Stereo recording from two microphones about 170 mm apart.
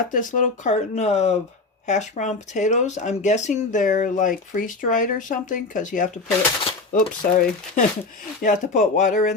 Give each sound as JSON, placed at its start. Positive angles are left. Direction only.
{"t": 0.0, "sound": "speech", "side_deg": 50}